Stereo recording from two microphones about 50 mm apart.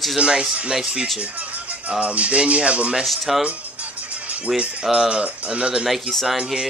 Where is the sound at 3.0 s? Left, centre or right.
Centre.